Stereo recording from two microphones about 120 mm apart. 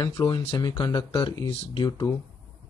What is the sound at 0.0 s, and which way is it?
Speech, 35° left (ahead or behind).